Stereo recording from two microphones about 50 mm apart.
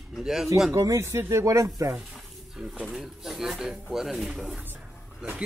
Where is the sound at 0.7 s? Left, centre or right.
Right.